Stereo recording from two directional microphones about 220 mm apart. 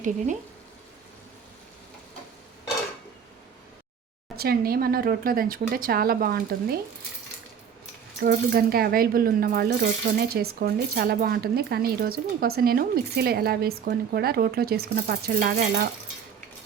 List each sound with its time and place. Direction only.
4.4 s speech: 45° right (ahead or behind)
8.2 s speech: 45° right (ahead or behind)